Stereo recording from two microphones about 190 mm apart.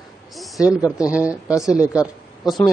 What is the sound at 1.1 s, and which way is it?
Speech, 5° right (ahead or behind).